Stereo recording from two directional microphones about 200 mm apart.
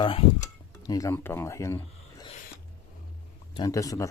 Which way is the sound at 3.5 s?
15° left (ahead or behind).